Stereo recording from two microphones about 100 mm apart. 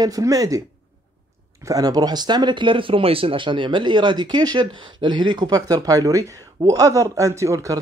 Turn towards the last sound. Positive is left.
turn(degrees=-30)  # may be behind; listen again after turning